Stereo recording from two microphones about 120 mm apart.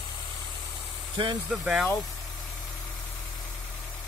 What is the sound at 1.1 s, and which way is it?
Speech, 40° right (ahead or behind).